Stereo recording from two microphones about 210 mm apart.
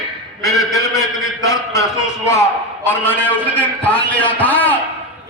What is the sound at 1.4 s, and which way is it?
A man's voice, 15° left (ahead or behind).